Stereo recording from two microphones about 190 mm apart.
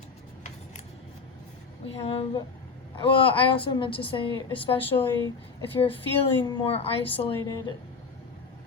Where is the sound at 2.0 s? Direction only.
30° left (ahead or behind).